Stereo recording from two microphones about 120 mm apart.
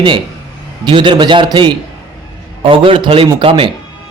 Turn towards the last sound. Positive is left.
turn(degrees=-50)  # may be behind; listen again after turning